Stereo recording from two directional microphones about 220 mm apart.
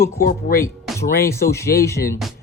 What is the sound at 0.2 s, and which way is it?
Speech, 40° left (ahead or behind).